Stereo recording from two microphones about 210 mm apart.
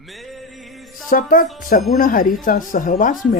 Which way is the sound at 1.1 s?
40° left (ahead or behind).